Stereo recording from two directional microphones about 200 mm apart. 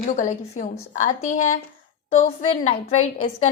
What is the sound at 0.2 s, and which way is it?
A woman's voice, 35° left (ahead or behind).